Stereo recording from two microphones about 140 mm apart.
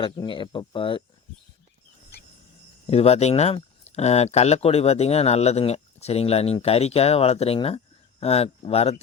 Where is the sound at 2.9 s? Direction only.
45° left (ahead or behind).